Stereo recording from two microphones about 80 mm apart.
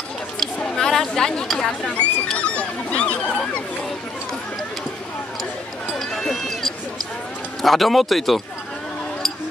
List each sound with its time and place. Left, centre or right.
0.6 s chatter: centre
3.2 s a sound: centre
5.9 s run: centre
7.6 s speech: centre